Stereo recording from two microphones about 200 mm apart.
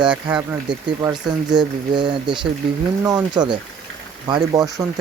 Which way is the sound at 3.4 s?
20° right (ahead or behind).